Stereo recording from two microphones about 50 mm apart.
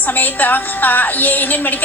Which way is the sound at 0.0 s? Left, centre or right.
Left.